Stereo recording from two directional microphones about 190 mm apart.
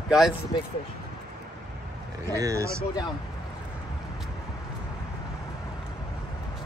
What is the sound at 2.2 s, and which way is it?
Speech, 20° right (ahead or behind).